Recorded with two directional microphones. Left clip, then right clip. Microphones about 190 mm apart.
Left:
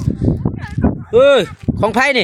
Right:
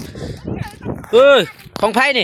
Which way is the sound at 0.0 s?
Centre (ahead or behind).